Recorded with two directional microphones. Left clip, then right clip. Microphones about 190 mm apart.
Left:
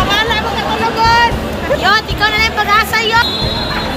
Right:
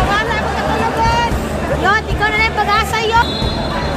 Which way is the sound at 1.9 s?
25° right (ahead or behind).